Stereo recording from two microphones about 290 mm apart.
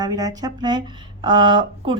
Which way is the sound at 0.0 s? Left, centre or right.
Centre.